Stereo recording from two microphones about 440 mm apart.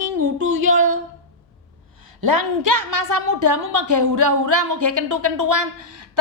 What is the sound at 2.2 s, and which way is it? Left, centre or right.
A woman's voice, right.